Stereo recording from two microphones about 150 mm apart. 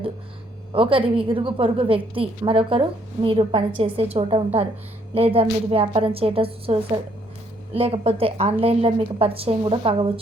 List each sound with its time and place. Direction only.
0.7 s a woman's voice: 35° right (ahead or behind)